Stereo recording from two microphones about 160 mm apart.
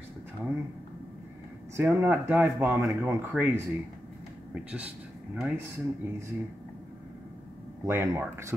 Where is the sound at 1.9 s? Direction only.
10° right (ahead or behind).